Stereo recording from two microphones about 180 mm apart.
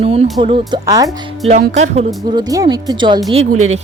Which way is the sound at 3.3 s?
35° right (ahead or behind).